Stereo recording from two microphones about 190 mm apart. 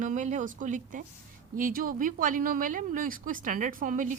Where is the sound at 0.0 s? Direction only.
40° right (ahead or behind).